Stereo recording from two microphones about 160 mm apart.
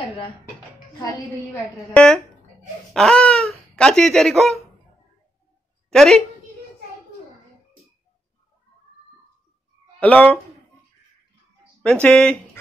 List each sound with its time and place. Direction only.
0.9 s a woman's voice: 20° left (ahead or behind)
2.0 s speech: 5° left (ahead or behind)
2.9 s a sound: 5° left (ahead or behind)
3.5 s speech: 5° left (ahead or behind)
5.9 s a woman's voice: centre (ahead or behind)
9.9 s speech: 10° left (ahead or behind)
11.8 s speech: 10° left (ahead or behind)